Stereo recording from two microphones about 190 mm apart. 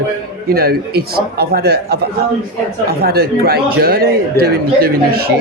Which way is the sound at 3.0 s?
55° right (ahead or behind).